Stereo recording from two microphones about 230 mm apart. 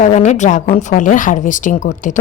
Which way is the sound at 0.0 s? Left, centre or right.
Left.